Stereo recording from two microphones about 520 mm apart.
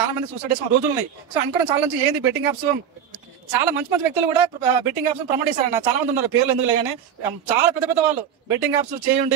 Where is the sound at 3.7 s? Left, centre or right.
Right.